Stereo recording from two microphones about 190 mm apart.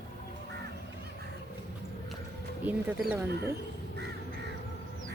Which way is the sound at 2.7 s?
10° right (ahead or behind).